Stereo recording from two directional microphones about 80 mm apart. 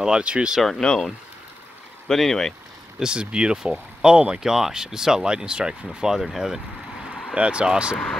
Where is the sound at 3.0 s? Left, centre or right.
Centre.